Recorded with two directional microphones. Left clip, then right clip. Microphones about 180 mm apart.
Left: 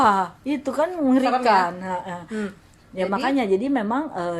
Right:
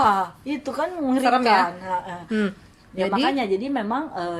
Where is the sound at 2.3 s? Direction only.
45° right (ahead or behind).